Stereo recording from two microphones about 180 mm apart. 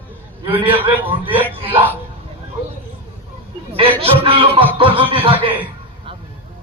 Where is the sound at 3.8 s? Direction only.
30° right (ahead or behind).